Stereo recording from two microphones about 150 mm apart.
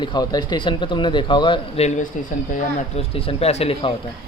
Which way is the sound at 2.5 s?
40° left (ahead or behind).